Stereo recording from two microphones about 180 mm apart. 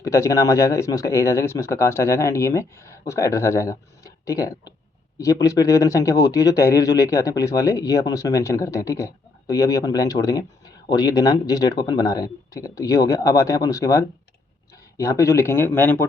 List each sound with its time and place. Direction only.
0.0 s speech: 15° left (ahead or behind)